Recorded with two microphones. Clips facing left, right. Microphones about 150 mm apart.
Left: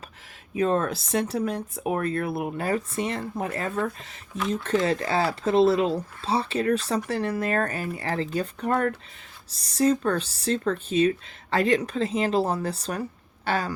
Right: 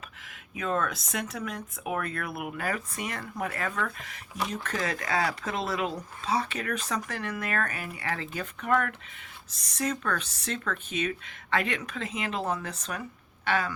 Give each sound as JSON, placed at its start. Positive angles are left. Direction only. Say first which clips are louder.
{"t": 0.5, "sound": "speech", "louder": "left 6 dB", "side_deg": 30}